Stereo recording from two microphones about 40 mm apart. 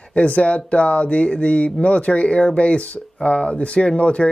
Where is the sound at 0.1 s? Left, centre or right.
Left.